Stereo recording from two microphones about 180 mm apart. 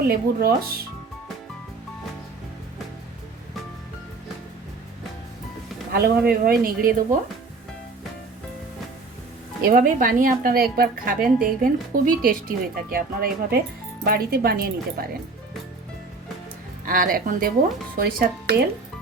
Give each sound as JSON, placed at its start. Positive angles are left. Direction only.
{"t": 0.1, "sound": "speech", "side_deg": -55}
{"t": 5.9, "sound": "speech", "side_deg": -60}
{"t": 9.6, "sound": "speech", "side_deg": -55}
{"t": 16.8, "sound": "speech", "side_deg": -50}